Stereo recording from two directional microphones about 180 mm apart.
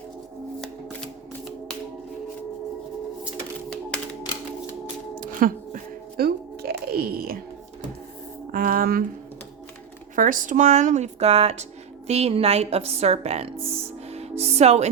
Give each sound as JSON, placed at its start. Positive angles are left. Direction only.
{"t": 5.2, "sound": "music", "side_deg": -50}
{"t": 8.5, "sound": "a sound", "side_deg": -50}
{"t": 10.2, "sound": "speech", "side_deg": -50}
{"t": 14.1, "sound": "music", "side_deg": -35}